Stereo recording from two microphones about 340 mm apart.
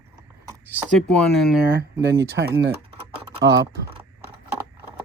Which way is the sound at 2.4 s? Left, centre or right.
Right.